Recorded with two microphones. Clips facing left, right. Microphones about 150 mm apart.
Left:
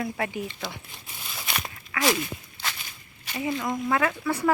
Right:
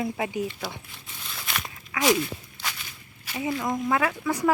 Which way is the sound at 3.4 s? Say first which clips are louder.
Right 1 dB; 15° right (ahead or behind).